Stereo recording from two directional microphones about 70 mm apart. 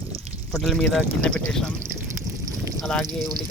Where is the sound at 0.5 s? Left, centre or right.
Centre.